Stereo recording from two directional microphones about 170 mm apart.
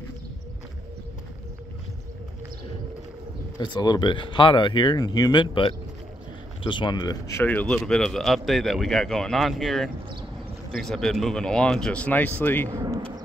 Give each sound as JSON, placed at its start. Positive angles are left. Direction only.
{"t": 3.5, "sound": "speech", "side_deg": 25}
{"t": 12.6, "sound": "speech", "side_deg": -20}